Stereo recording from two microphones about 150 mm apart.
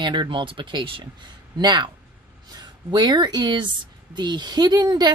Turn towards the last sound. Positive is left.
turn(degrees=-30)  # may be behind; listen again after turning